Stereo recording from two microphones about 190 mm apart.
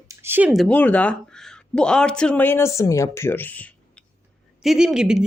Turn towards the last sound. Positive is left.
turn(degrees=-5)  # may be behind; listen again after turning